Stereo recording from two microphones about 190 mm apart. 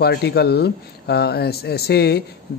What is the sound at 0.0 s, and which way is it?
Speech, 60° left (ahead or behind).